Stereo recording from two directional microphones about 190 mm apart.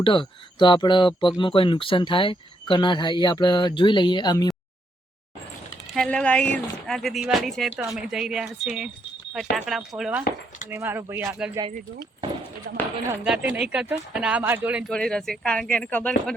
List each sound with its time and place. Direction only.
0.0 s speech: 25° left (ahead or behind)
5.9 s speech: 5° left (ahead or behind)
12.7 s speech: 55° right (ahead or behind)
13.2 s speech: 5° right (ahead or behind)